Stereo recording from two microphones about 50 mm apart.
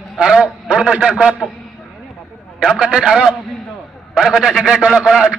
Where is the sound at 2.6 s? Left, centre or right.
Centre.